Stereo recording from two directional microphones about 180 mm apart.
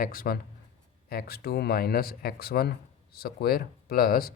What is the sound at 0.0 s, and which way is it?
Speech, 55° left (ahead or behind).